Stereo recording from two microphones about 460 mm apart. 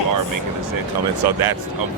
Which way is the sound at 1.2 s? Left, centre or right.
Right.